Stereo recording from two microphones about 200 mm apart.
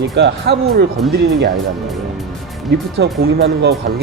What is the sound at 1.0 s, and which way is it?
Speech, centre (ahead or behind).